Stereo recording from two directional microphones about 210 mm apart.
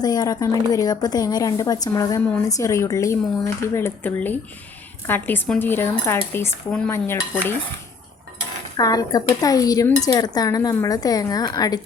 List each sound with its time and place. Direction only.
0.0 s speech: 20° left (ahead or behind)
8.8 s speech: 20° left (ahead or behind)